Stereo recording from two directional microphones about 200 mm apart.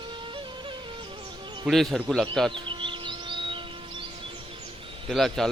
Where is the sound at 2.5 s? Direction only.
25° right (ahead or behind).